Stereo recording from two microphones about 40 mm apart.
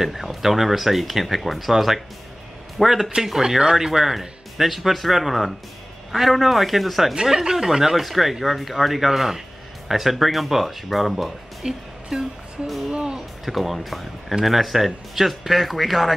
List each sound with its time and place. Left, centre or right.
0.0 s speech: centre
7.2 s speech: centre
11.6 s music: centre
12.6 s speech: centre
12.9 s speech: centre
13.5 s speech: centre